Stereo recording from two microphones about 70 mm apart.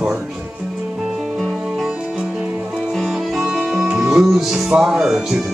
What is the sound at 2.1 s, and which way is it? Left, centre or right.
Music, centre.